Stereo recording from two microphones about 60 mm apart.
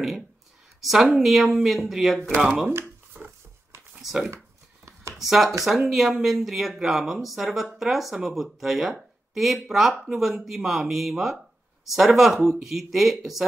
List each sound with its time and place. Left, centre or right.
0.7 s speech: centre
3.1 s dog: right
4.0 s speech: centre